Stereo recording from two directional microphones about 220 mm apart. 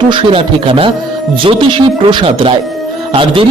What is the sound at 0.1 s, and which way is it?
Speech, 25° right (ahead or behind).